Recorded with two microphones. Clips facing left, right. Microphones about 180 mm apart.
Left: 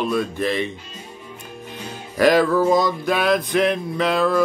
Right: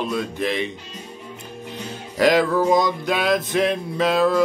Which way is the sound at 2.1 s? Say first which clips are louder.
Left 2 dB; 20° right (ahead or behind).